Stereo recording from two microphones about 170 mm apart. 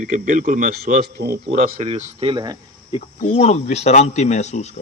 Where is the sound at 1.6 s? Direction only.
45° right (ahead or behind); by 2.5 s 30° right (ahead or behind).